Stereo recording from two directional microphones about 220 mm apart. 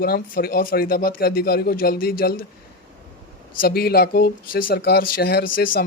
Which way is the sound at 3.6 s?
45° left (ahead or behind).